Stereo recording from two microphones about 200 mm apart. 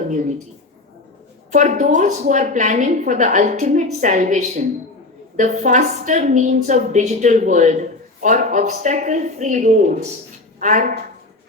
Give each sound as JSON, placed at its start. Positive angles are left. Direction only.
{"t": 1.5, "sound": "a woman's voice", "side_deg": -40}